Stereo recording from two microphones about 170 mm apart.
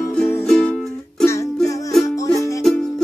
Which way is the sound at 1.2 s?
15° left (ahead or behind).